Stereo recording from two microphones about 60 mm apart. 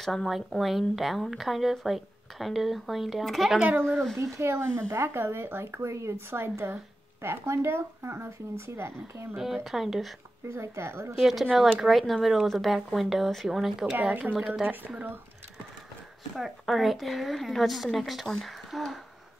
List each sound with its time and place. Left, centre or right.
0.0 s a child's voice: centre
4.2 s speech: right
9.4 s speech: centre
10.5 s speech: right
11.1 s speech: centre
14.5 s a woman's voice: right
16.3 s speech: centre